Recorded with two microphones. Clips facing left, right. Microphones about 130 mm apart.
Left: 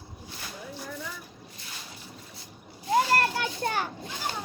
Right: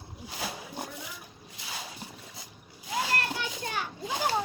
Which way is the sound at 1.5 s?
90° right.